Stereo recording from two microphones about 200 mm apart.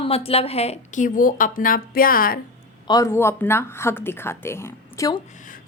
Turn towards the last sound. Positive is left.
turn(degrees=15)  # may be behind; listen again after turning